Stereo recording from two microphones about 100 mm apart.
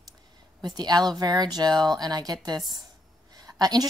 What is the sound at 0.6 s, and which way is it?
A woman's voice, 40° right (ahead or behind).